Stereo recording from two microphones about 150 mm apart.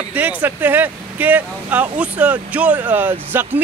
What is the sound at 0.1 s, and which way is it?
Speech, 10° right (ahead or behind).